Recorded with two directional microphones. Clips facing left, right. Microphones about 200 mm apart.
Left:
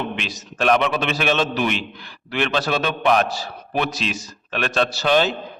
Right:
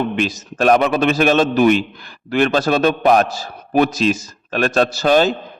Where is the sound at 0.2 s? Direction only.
45° right (ahead or behind).